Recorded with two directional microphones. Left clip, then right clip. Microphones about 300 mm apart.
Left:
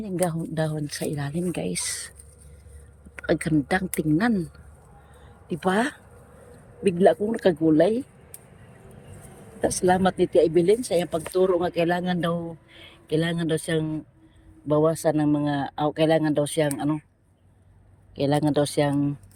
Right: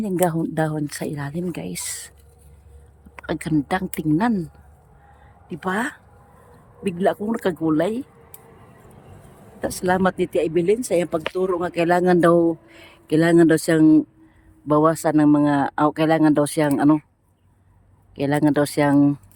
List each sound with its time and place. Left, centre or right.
0.0 s speech: centre
3.2 s speech: centre
5.5 s speech: centre
9.6 s speech: centre
12.3 s speech: right
12.6 s speech: centre
14.8 s speech: centre
18.1 s speech: centre